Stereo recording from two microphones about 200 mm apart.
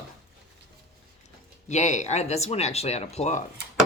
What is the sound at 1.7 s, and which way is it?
Speech, 35° left (ahead or behind).